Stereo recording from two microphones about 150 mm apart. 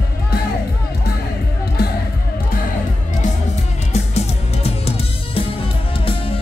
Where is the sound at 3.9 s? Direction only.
45° left (ahead or behind).